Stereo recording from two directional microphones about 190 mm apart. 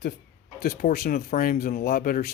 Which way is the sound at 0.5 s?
55° left (ahead or behind).